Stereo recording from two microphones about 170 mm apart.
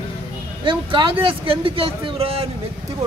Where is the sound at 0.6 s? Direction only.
30° right (ahead or behind).